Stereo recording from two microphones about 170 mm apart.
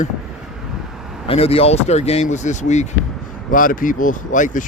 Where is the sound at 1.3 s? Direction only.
35° left (ahead or behind).